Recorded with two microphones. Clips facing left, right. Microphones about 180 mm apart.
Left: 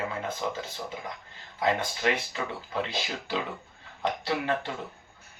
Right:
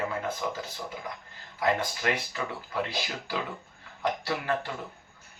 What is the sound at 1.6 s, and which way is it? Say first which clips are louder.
Speech: left 1 dB; 25° left (ahead or behind).